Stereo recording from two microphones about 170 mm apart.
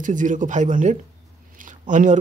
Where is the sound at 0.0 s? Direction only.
50° right (ahead or behind).